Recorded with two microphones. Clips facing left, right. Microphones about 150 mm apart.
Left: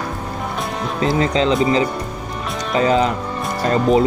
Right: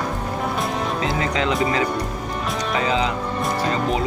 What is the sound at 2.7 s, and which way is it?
Speech, 45° left (ahead or behind).